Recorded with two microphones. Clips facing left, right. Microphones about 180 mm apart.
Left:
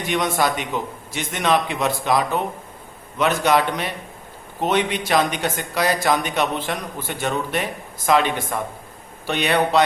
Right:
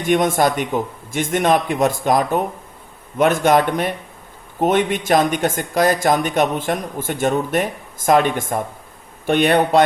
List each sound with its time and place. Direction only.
0.0 s speech: 50° right (ahead or behind)